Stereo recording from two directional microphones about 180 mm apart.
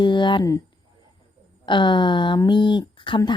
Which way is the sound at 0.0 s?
25° left (ahead or behind).